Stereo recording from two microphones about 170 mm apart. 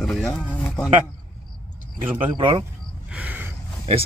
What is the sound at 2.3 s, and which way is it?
Speech, 30° right (ahead or behind).